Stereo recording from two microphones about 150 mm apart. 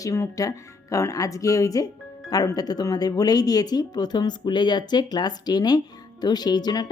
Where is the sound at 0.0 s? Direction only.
20° left (ahead or behind).